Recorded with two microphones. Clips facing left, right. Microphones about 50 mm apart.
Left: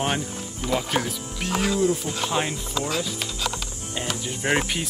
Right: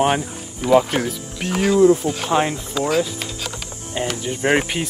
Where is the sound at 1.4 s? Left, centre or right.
Right.